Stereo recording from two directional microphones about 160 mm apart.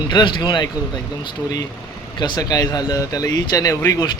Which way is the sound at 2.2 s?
25° left (ahead or behind).